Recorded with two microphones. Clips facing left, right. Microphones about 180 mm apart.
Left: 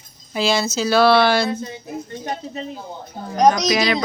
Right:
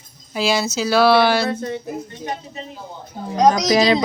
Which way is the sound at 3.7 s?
30° right (ahead or behind).